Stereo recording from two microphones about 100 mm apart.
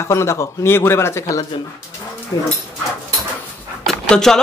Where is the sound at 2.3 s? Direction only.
35° left (ahead or behind).